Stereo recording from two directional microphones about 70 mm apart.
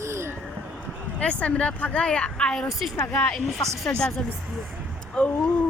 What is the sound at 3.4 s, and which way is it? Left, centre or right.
Speech, centre.